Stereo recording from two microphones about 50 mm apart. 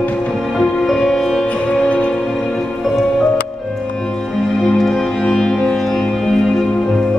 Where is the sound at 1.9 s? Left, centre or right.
Left.